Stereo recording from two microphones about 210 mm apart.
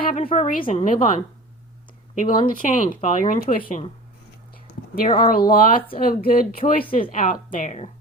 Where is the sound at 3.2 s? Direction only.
40° left (ahead or behind).